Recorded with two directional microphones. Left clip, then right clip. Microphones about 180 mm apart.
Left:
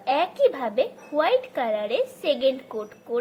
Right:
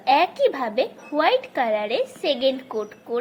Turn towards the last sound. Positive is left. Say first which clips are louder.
# right 2 dB
turn(degrees=-15)  # may be behind; listen again after turning